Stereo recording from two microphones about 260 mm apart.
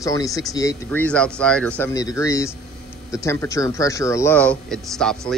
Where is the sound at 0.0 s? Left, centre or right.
Centre.